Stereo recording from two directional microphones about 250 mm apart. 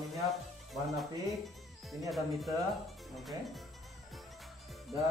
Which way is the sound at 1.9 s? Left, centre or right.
Centre.